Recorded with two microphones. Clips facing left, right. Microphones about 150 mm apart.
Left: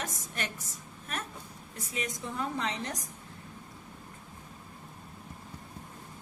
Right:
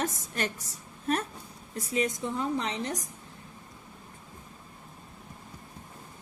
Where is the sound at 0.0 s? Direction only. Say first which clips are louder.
Right 6 dB; 35° right (ahead or behind).